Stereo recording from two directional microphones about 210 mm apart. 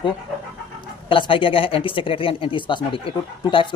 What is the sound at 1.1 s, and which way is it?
Speech, 25° left (ahead or behind).